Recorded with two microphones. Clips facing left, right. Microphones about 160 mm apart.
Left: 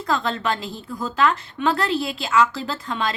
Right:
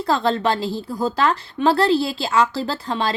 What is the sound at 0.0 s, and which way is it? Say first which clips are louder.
A woman's voice: right 4 dB; 35° right (ahead or behind).